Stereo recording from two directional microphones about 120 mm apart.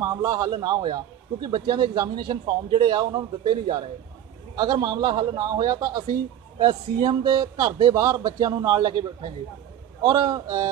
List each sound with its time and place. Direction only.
0.0 s a man's voice: 30° right (ahead or behind)